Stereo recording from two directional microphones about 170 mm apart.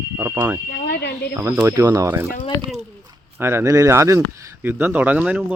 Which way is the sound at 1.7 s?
20° right (ahead or behind).